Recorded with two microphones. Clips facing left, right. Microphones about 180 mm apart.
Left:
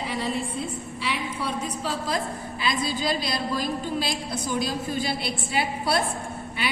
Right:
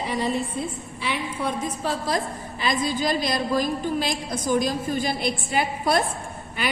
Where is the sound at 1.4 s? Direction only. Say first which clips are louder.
Right 5 dB; 45° right (ahead or behind).